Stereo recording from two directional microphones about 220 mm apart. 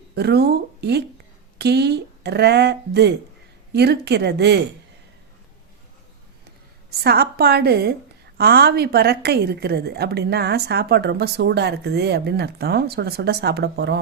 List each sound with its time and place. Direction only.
0.2 s a woman's voice: 45° right (ahead or behind)
7.0 s a woman's voice: 45° right (ahead or behind)